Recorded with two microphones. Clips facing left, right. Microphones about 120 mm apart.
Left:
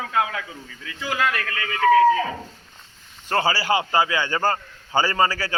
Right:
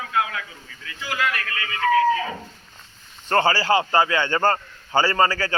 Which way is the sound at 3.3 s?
10° left (ahead or behind).